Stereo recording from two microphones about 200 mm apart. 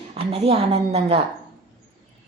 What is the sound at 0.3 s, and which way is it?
Speech, 30° right (ahead or behind).